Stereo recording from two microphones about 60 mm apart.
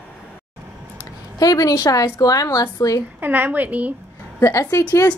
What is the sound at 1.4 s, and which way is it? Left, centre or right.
A woman's voice, left.